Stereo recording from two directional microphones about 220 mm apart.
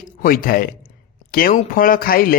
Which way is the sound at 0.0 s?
40° left (ahead or behind).